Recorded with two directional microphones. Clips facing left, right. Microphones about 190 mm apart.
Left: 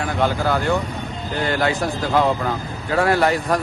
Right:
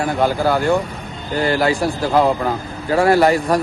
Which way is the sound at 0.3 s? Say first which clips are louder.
Right 4 dB; 30° right (ahead or behind).